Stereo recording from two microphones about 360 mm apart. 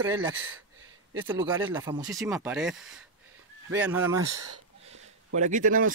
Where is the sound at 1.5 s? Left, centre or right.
Centre.